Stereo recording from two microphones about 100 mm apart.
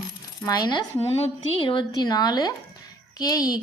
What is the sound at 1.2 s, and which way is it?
A woman's voice, 60° left (ahead or behind).